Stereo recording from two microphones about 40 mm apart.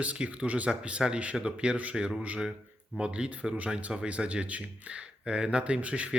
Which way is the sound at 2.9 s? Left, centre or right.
Right.